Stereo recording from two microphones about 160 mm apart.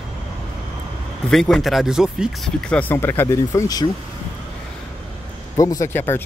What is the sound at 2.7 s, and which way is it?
Speech, 10° left (ahead or behind).